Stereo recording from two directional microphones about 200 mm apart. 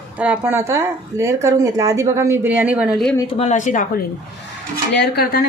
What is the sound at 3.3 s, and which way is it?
Speech, 35° left (ahead or behind).